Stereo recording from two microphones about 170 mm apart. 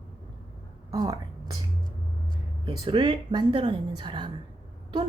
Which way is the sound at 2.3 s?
25° right (ahead or behind).